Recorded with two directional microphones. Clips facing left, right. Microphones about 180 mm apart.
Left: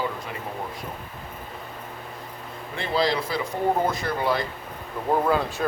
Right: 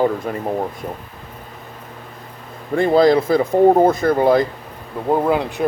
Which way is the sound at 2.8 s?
50° right (ahead or behind).